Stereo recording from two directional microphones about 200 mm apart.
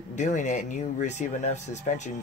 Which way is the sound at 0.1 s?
35° left (ahead or behind).